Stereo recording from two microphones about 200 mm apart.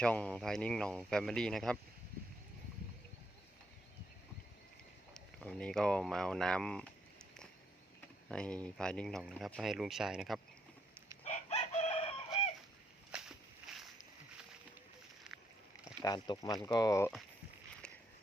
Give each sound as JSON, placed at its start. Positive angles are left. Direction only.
{"t": 0.0, "sound": "speech", "side_deg": 5}
{"t": 5.1, "sound": "speech", "side_deg": 5}
{"t": 8.3, "sound": "speech", "side_deg": 5}
{"t": 11.2, "sound": "chicken", "side_deg": 30}
{"t": 13.1, "sound": "walk", "side_deg": -5}
{"t": 16.0, "sound": "speech", "side_deg": 20}